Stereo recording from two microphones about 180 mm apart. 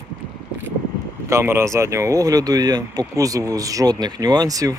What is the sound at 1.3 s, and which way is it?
Speech, 15° right (ahead or behind).